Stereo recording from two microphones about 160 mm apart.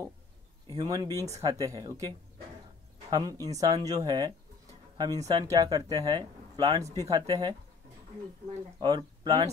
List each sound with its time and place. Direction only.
0.7 s speech: 25° right (ahead or behind)
8.7 s speech: 25° right (ahead or behind)